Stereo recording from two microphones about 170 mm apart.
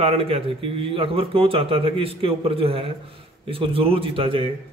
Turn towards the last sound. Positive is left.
turn(degrees=-35)  # may be behind; listen again after turning